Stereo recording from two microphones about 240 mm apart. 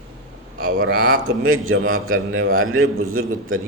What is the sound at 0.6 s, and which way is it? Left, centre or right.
A man's voice, right.